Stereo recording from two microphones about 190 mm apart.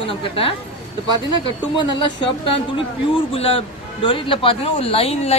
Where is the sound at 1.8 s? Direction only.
25° left (ahead or behind).